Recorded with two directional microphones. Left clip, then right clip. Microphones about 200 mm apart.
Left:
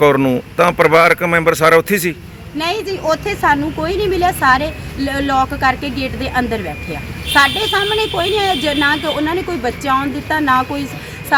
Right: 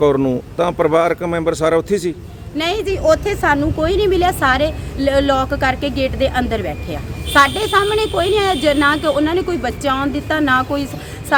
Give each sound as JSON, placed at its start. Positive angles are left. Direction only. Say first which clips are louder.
{"t": 0.0, "sound": "speech", "louder": "left 3 dB", "side_deg": 0}
{"t": 2.6, "sound": "a woman's voice", "louder": "right 1 dB", "side_deg": -20}